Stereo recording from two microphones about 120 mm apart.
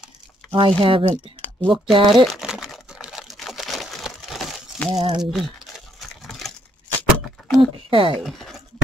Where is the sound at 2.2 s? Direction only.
5° right (ahead or behind).